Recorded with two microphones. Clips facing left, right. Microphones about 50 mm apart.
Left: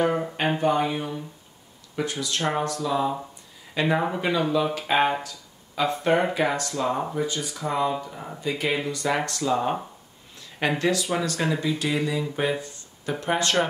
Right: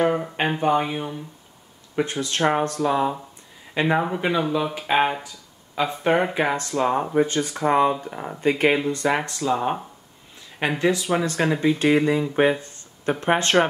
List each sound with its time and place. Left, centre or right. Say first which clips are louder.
0.6 s speech: right 2 dB; centre
2.0 s speech: right 4 dB; right
3.8 s speech: right 2 dB; right
7.2 s speech: right 7 dB; right
8.8 s speech: right 3 dB; right
9.3 s speech: right 1 dB; centre
10.8 s speech: right 6 dB; centre